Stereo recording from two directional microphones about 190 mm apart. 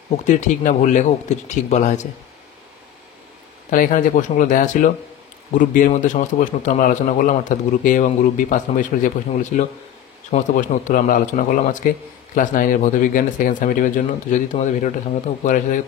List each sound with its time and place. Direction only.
0.3 s speech: 40° left (ahead or behind)
3.7 s a man's voice: 45° left (ahead or behind)